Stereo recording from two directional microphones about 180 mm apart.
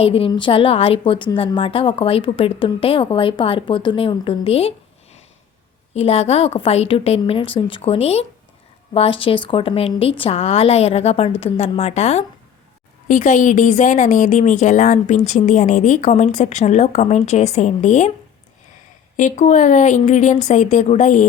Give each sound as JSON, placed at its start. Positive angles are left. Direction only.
{"t": 0.0, "sound": "a woman's voice", "side_deg": 30}
{"t": 5.9, "sound": "a woman's voice", "side_deg": 35}
{"t": 19.1, "sound": "speech", "side_deg": 45}